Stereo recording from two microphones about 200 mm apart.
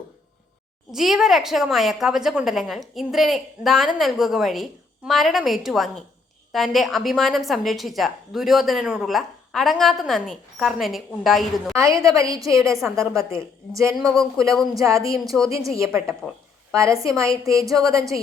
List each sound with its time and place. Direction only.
0.9 s a woman's voice: centre (ahead or behind)
11.7 s a woman's voice: 15° right (ahead or behind)
14.5 s a woman's voice: centre (ahead or behind)
14.8 s a woman's voice: 15° right (ahead or behind)
15.1 s a woman's voice: centre (ahead or behind)
15.4 s a woman's voice: 15° right (ahead or behind)